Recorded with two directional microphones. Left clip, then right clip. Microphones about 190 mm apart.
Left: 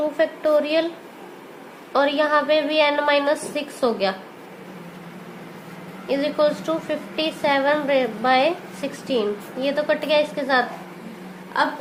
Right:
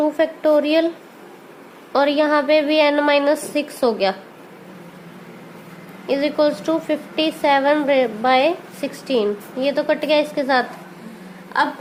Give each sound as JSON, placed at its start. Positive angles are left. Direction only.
{"t": 0.2, "sound": "a woman's voice", "side_deg": -40}
{"t": 1.9, "sound": "a woman's voice", "side_deg": -45}
{"t": 6.1, "sound": "a woman's voice", "side_deg": -40}